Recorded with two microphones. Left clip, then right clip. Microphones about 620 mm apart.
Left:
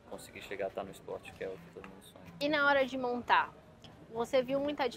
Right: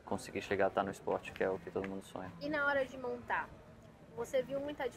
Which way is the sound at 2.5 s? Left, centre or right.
Left.